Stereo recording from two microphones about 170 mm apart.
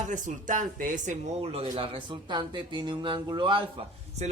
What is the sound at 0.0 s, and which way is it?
Speech, 50° right (ahead or behind).